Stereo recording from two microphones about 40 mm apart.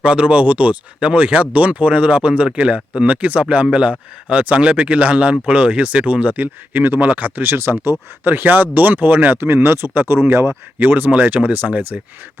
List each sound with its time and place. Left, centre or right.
0.0 s speech: right
3.1 s speech: right
6.8 s speech: right
7.4 s speech: right
8.3 s speech: right
9.4 s speech: right
10.8 s speech: right